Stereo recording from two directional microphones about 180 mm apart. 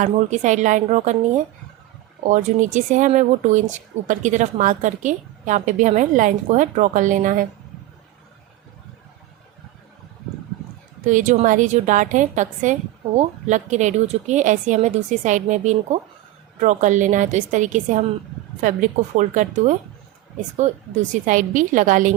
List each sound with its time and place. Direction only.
0.0 s a woman's voice: 40° right (ahead or behind)
11.0 s a woman's voice: 45° right (ahead or behind)